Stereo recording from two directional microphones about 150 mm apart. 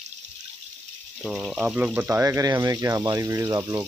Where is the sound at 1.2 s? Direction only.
Centre (ahead or behind).